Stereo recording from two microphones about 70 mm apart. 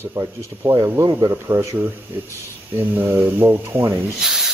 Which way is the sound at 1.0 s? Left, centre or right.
Right.